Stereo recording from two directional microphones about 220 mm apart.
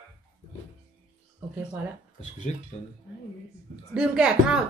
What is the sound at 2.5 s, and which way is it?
Speech, 30° left (ahead or behind).